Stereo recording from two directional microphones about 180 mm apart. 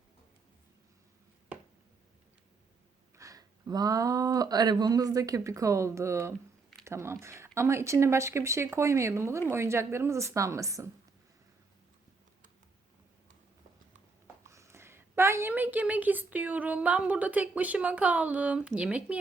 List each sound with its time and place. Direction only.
3.2 s speech: 20° right (ahead or behind)
14.4 s a woman's voice: 15° right (ahead or behind)